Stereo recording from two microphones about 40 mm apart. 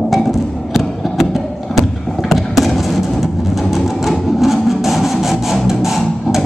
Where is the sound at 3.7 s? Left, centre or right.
Centre.